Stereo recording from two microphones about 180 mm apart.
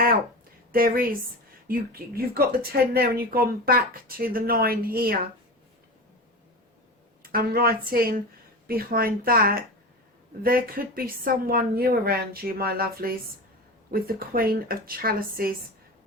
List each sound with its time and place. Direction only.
0.7 s speech: 55° right (ahead or behind)
7.2 s speech: 55° right (ahead or behind)